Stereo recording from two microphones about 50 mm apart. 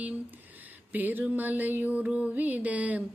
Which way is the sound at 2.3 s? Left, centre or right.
Right.